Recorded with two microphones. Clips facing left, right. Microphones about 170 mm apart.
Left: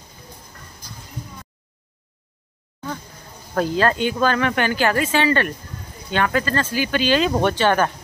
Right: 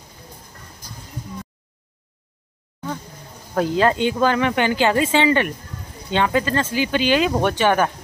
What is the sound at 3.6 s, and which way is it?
Speech, 15° right (ahead or behind).